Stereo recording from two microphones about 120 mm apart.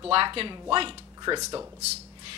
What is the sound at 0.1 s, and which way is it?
Speech, 50° right (ahead or behind).